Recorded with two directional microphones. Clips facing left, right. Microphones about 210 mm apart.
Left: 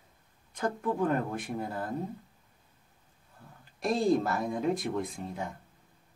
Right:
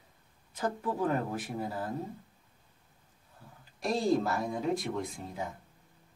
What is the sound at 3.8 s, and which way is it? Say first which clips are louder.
Speech: left 2 dB; centre (ahead or behind).